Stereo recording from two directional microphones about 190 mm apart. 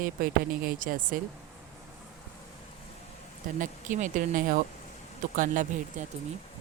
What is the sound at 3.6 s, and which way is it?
Speech, 40° right (ahead or behind).